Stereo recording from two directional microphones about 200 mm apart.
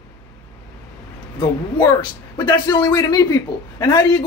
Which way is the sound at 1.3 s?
20° left (ahead or behind).